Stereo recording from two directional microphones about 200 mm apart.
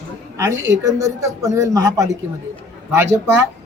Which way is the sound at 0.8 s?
15° right (ahead or behind).